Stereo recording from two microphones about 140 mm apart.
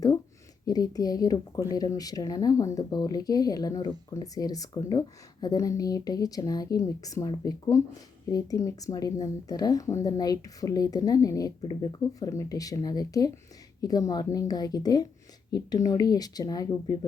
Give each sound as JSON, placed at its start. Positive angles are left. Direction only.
{"t": 0.6, "sound": "speech", "side_deg": 25}